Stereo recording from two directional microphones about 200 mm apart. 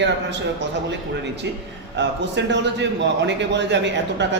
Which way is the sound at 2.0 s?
60° right (ahead or behind).